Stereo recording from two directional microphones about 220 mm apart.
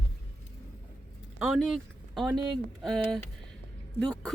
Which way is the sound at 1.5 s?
Centre (ahead or behind).